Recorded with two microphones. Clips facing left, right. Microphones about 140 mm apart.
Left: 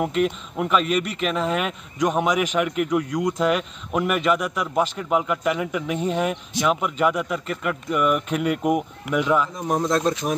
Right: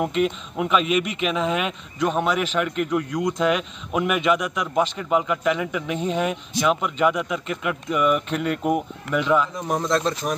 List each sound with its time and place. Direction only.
0.0 s a man's voice: centre (ahead or behind)
2.0 s a man's voice: 10° left (ahead or behind)